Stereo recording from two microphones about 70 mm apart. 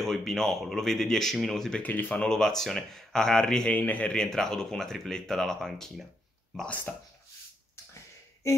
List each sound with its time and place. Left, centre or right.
0.0 s speech: centre
1.8 s speech: left
2.2 s speech: centre
3.7 s speech: left; by 6.0 s centre